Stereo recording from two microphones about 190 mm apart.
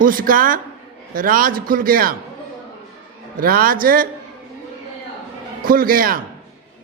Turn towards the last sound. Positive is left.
turn(degrees=-50)  # may be behind; listen again after turning